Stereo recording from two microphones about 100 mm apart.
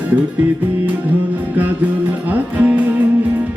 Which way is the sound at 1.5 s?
15° right (ahead or behind).